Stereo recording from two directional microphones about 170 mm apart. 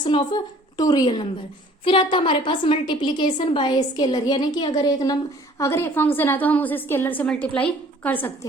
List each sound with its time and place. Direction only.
0.0 s a woman's voice: 30° left (ahead or behind); by 8.3 s 10° left (ahead or behind)